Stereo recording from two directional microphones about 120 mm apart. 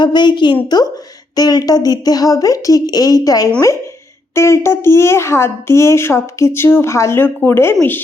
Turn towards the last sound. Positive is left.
turn(degrees=20)  # may be behind; listen again after turning